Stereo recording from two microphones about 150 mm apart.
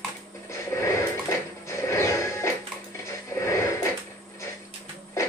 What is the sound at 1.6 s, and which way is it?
Music, 20° left (ahead or behind).